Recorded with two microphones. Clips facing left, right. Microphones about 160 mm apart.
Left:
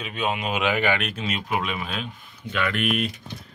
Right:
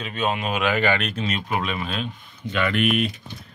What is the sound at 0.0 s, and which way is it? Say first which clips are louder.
Speech: right 2 dB; 15° left (ahead or behind).